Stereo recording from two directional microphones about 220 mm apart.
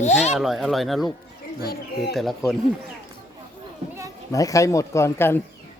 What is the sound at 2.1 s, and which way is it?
Speech, centre (ahead or behind).